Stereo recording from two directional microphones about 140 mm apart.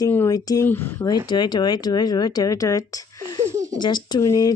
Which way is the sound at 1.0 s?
30° left (ahead or behind).